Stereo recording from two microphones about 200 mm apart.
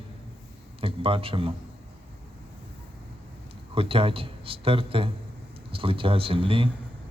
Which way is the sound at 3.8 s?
30° right (ahead or behind).